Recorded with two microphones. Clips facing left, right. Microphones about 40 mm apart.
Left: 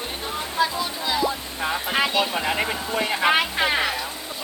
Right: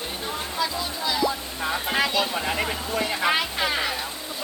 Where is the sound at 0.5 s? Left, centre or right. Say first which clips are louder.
Left 6 dB; left.